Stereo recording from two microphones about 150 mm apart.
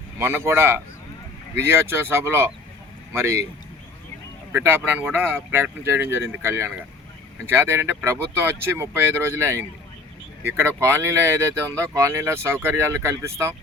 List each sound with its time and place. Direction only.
0.2 s speech: 15° right (ahead or behind)
4.5 s speech: 15° right (ahead or behind)